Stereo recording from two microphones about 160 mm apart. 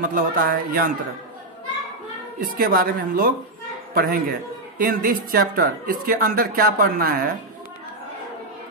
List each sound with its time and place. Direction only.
0.0 s a man's voice: 65° right (ahead or behind)
2.5 s a man's voice: 65° right (ahead or behind)